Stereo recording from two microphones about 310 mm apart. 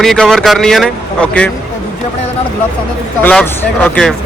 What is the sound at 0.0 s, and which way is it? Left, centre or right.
A man's voice, centre.